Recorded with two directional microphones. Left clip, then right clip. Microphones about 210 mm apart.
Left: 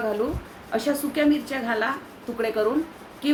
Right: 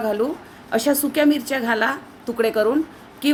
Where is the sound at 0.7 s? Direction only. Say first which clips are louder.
Right 5 dB; 50° right (ahead or behind).